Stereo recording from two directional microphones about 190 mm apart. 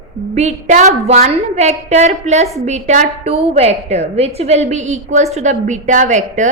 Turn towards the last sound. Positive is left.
turn(degrees=-40)  # may be behind; listen again after turning